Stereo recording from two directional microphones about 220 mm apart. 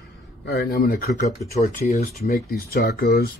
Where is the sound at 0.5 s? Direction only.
45° left (ahead or behind).